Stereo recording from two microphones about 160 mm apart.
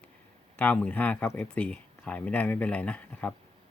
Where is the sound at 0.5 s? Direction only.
10° left (ahead or behind).